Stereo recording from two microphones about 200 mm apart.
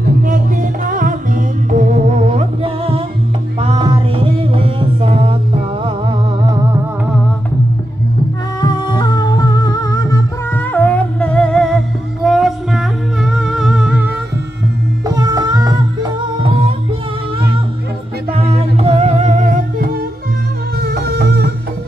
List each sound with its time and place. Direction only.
0.2 s music: 40° right (ahead or behind); by 6.8 s 20° right (ahead or behind)
8.5 s music: 20° left (ahead or behind); by 14.1 s 5° right (ahead or behind)
15.0 s music: 20° right (ahead or behind)
18.3 s music: 30° right (ahead or behind)
20.8 s music: 55° right (ahead or behind)